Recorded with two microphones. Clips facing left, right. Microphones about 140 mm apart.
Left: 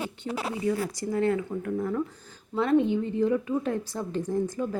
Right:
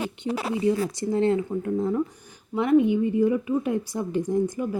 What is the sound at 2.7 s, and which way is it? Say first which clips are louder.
A woman's voice: right 5 dB; 10° right (ahead or behind).